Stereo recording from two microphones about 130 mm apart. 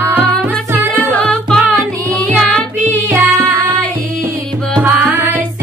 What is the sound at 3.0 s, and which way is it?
Music, 20° right (ahead or behind).